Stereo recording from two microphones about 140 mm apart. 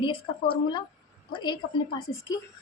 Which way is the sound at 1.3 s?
35° left (ahead or behind).